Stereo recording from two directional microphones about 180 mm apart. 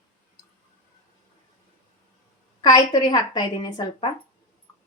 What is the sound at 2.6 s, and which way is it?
A woman's voice, 20° left (ahead or behind).